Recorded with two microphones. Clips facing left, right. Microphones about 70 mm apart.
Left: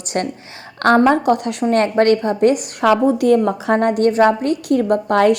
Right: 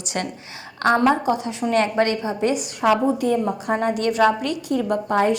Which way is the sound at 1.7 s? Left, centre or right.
Left.